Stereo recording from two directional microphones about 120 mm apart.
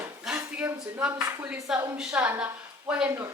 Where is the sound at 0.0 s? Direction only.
10° right (ahead or behind).